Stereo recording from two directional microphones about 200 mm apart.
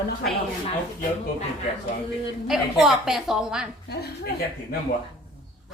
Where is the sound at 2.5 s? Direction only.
Centre (ahead or behind).